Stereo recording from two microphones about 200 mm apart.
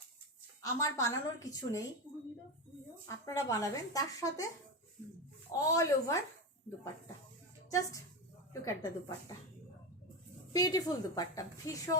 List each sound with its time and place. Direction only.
0.6 s a woman's voice: 15° left (ahead or behind)
3.2 s a woman's voice: 15° left (ahead or behind)
5.5 s a woman's voice: 15° left (ahead or behind)
7.7 s a woman's voice: 15° left (ahead or behind)
10.5 s a woman's voice: 20° left (ahead or behind)